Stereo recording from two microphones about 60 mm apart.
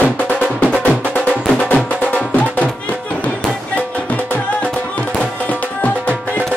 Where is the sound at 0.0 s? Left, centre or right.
Left.